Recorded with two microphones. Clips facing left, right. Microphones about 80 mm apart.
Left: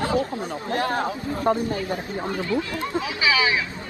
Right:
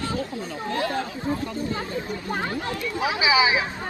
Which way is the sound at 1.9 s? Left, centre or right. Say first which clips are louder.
Left 2 dB; left.